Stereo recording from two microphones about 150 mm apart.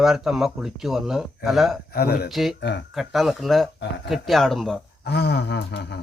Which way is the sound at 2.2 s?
Centre (ahead or behind).